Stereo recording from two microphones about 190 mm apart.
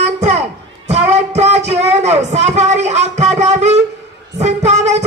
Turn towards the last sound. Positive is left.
turn(degrees=-35)  # may be behind; listen again after turning